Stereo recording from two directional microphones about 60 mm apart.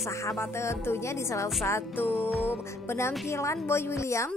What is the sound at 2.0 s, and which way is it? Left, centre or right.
Music, left.